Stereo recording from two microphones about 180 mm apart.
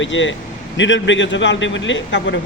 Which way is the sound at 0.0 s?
90° left.